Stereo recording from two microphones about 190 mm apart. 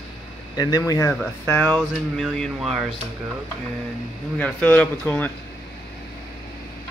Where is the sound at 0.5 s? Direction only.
20° left (ahead or behind).